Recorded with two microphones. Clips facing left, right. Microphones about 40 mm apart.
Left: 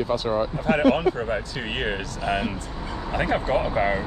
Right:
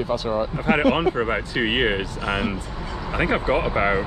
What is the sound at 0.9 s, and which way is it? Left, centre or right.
Speech, right.